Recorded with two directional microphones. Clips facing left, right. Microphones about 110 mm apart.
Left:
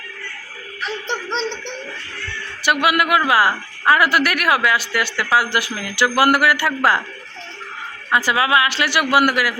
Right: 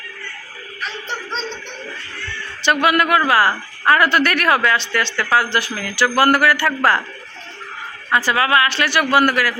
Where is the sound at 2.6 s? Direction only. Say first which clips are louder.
Right 1 dB; 10° left (ahead or behind).